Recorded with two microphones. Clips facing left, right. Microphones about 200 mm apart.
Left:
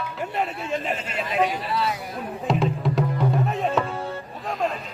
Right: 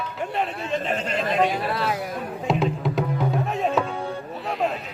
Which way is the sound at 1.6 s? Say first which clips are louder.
Right 1 dB; 55° right (ahead or behind).